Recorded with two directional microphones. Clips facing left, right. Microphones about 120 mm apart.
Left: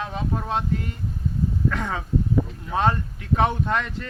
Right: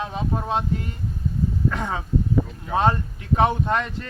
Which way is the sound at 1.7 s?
25° right (ahead or behind).